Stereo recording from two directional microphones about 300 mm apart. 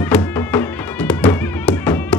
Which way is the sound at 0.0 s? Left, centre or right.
Centre.